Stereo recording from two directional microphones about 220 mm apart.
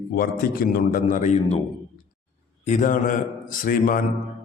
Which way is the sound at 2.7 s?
35° left (ahead or behind).